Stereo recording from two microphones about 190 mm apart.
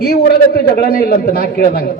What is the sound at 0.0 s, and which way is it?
A man's voice, 55° left (ahead or behind).